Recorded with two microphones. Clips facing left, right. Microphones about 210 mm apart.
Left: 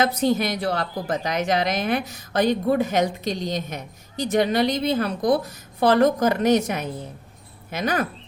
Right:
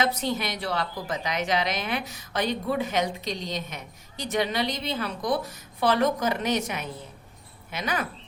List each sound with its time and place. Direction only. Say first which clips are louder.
0.0 s a woman's voice: left 6 dB; 45° left (ahead or behind)